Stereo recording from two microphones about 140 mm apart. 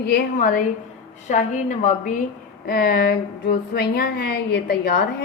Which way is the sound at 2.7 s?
90° left.